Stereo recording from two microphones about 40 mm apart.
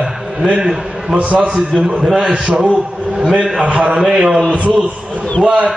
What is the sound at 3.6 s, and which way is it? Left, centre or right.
Speech, right.